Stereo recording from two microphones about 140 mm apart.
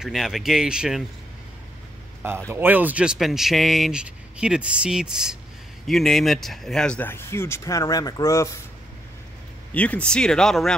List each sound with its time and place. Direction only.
0.0 s speech: centre (ahead or behind)
2.5 s speech: 15° right (ahead or behind); by 8.5 s 20° left (ahead or behind)
9.8 s speech: 10° left (ahead or behind)